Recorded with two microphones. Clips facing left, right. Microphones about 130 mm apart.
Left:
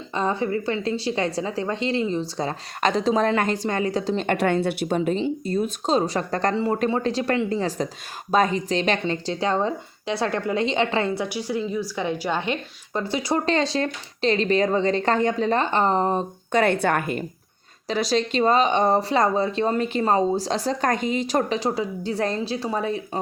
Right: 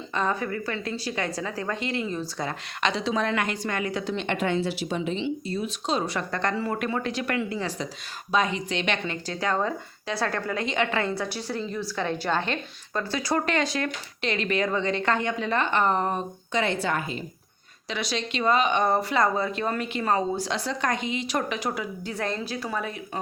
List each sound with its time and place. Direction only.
0.1 s a woman's voice: 25° left (ahead or behind)
2.4 s speech: 40° left (ahead or behind)
4.4 s speech: 55° left (ahead or behind); by 6.5 s 40° left (ahead or behind)
6.5 s a woman's voice: 25° left (ahead or behind)
8.3 s a woman's voice: 45° left (ahead or behind)
11.2 s a woman's voice: 15° left (ahead or behind); by 16.2 s 30° left (ahead or behind)
16.5 s a woman's voice: 55° left (ahead or behind)
17.8 s a woman's voice: 40° left (ahead or behind)